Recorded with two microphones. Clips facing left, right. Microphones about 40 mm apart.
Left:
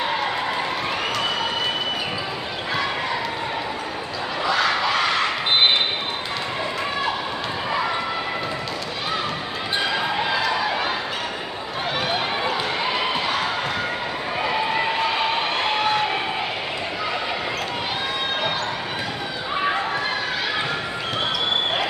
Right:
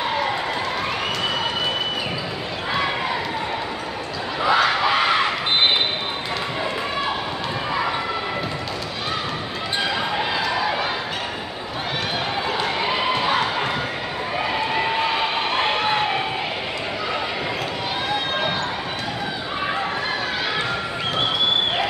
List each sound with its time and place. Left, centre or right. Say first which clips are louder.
4.4 s crowd: right 3 dB; centre
10.1 s run: even; centre
14.4 s a sound: left 1 dB; centre